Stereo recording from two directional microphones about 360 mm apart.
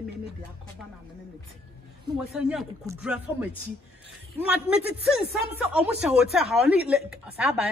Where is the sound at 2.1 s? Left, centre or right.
Centre.